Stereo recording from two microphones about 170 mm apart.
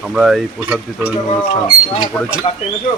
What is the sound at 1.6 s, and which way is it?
Speech, 25° left (ahead or behind).